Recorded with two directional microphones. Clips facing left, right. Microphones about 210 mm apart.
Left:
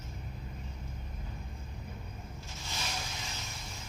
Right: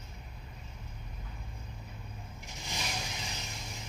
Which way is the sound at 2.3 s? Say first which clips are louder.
Right 2 dB; 15° right (ahead or behind).